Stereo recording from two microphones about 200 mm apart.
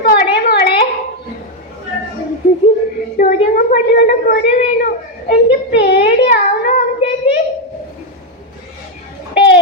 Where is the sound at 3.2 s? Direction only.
40° left (ahead or behind).